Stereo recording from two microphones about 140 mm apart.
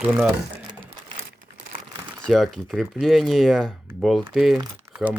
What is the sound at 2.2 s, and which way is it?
Speech, centre (ahead or behind).